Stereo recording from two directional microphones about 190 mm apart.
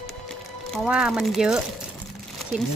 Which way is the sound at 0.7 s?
Centre (ahead or behind).